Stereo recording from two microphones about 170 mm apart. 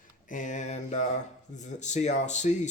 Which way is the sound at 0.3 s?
50° left (ahead or behind).